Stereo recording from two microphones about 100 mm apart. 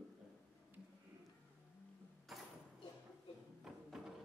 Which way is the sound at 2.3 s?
Centre (ahead or behind).